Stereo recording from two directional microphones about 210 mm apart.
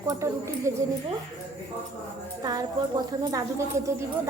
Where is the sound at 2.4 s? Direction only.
20° right (ahead or behind).